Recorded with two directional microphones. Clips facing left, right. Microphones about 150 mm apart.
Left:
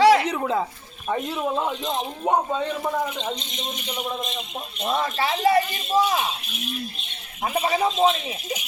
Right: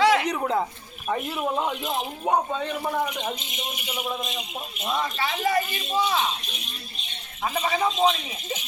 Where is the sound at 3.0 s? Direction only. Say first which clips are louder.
Left 1 dB; 10° right (ahead or behind).